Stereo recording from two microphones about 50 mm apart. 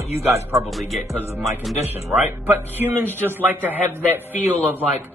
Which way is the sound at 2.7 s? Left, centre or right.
Right.